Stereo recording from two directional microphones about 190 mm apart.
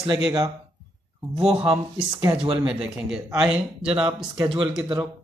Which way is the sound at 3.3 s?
5° right (ahead or behind).